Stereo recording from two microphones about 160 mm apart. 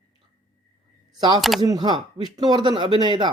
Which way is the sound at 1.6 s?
25° right (ahead or behind).